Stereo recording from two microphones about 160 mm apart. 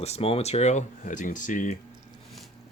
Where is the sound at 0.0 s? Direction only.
40° left (ahead or behind).